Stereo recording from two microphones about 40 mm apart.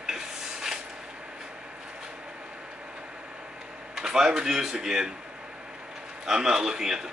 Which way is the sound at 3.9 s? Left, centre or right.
Centre.